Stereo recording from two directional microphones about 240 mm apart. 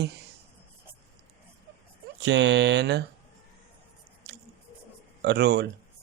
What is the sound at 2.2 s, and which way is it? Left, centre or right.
Speech, right.